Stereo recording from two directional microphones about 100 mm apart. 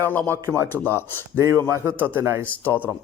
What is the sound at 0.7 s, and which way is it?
Speech, 20° left (ahead or behind).